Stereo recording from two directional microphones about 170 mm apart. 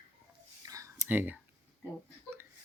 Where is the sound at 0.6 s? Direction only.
20° right (ahead or behind).